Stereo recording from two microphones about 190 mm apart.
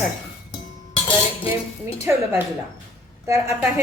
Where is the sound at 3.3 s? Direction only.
15° right (ahead or behind).